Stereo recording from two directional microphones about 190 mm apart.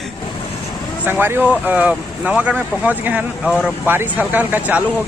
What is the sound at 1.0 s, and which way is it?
Speech, 10° right (ahead or behind).